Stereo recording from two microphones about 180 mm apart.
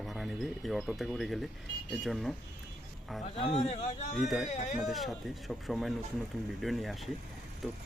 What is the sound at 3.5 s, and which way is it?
Speech, 40° left (ahead or behind).